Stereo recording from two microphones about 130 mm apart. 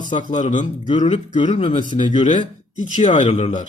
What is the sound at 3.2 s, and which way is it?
Speech, 45° left (ahead or behind).